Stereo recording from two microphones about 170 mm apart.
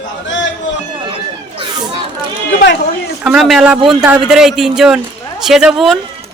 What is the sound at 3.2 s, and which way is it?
A man's voice, centre (ahead or behind).